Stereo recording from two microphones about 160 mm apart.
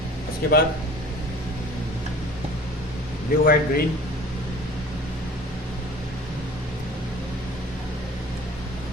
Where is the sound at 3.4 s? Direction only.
65° left (ahead or behind).